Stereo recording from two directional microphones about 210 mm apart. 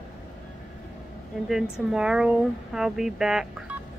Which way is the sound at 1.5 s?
Centre (ahead or behind).